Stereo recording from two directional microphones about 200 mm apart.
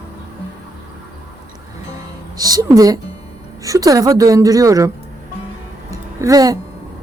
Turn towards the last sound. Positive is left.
turn(degrees=-15)  # may be behind; listen again after turning